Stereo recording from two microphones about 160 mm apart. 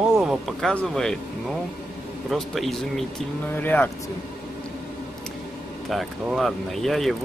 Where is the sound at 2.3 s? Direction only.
Centre (ahead or behind).